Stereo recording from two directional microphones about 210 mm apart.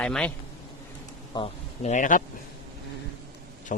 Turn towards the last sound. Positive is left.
turn(degrees=40)  # may be behind; listen again after turning